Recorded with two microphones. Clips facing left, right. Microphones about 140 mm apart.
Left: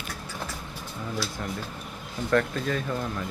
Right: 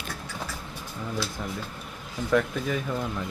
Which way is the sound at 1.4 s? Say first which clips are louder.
Left 1 dB; 5° right (ahead or behind).